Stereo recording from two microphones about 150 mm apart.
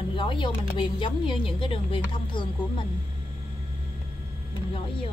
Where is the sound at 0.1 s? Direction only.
35° left (ahead or behind).